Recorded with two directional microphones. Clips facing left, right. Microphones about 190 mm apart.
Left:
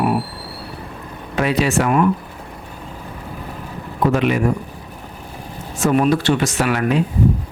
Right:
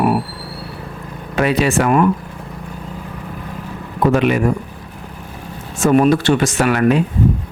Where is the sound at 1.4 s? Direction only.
55° right (ahead or behind).